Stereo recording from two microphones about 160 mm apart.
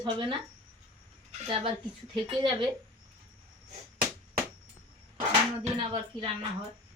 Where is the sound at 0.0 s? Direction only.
30° right (ahead or behind).